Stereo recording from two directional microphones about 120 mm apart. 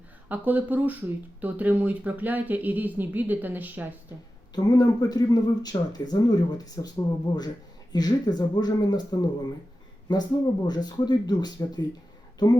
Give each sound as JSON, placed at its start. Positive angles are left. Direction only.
{"t": 0.3, "sound": "speech", "side_deg": -15}
{"t": 4.5, "sound": "speech", "side_deg": 35}
{"t": 10.1, "sound": "speech", "side_deg": 35}